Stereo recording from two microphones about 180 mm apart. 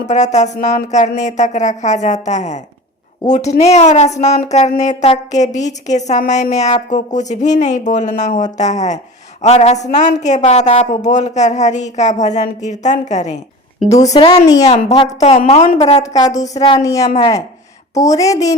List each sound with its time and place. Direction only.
0.1 s a woman's voice: 40° left (ahead or behind)
14.0 s a woman's voice: 25° left (ahead or behind)
16.1 s a woman's voice: 20° left (ahead or behind)
17.1 s a woman's voice: 30° left (ahead or behind)
17.9 s a woman's voice: 20° left (ahead or behind)